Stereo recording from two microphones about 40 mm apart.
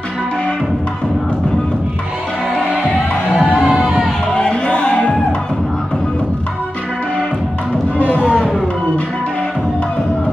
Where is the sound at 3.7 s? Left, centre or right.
Centre.